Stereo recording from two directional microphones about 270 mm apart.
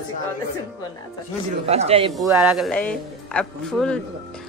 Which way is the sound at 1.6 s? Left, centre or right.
Right.